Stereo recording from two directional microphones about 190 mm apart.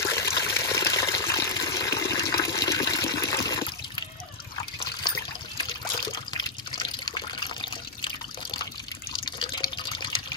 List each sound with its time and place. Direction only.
0.1 s water: 15° left (ahead or behind)
6.3 s water: 25° left (ahead or behind)
9.2 s water: 25° left (ahead or behind)